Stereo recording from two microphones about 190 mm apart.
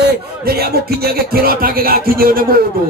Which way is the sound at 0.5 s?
55° right (ahead or behind).